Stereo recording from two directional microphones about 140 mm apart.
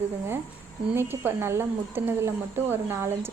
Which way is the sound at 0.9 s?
15° right (ahead or behind).